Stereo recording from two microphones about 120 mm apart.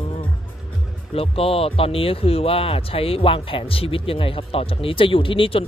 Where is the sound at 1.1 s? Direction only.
55° left (ahead or behind).